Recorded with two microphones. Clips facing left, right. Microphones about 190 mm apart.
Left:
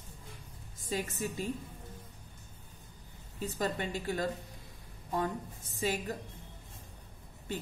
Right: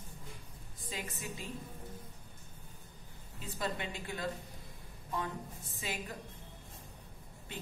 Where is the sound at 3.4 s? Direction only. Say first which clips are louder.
Left 5 dB; 40° left (ahead or behind).